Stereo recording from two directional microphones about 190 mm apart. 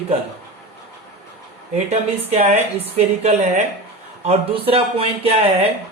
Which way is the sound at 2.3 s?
35° right (ahead or behind).